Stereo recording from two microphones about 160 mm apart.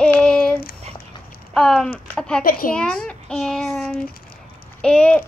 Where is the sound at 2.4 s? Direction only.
65° left (ahead or behind).